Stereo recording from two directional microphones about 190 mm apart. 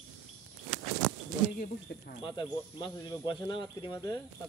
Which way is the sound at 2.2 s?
25° left (ahead or behind).